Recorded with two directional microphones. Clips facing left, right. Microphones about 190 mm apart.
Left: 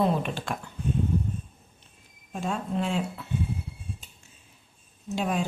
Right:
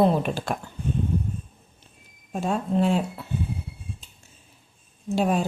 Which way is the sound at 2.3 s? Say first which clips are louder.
Right 5 dB; 35° right (ahead or behind).